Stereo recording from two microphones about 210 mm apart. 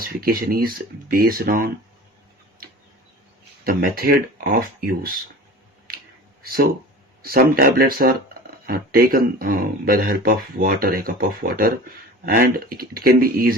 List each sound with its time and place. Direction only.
0.0 s speech: 45° right (ahead or behind)
3.6 s speech: 45° right (ahead or behind)
6.4 s speech: 45° right (ahead or behind)